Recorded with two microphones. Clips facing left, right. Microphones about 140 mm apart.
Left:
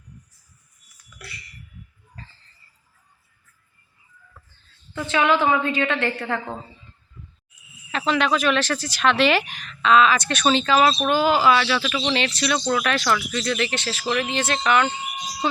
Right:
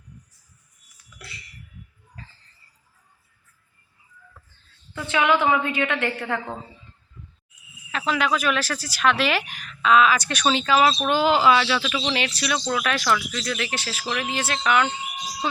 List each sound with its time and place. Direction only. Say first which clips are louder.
4.9 s speech: left 1 dB; 15° right (ahead or behind)
7.9 s speech: left 2 dB; 5° right (ahead or behind)
11.0 s speech: even; 15° right (ahead or behind)